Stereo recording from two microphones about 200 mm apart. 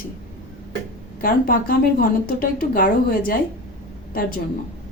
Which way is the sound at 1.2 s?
45° left (ahead or behind).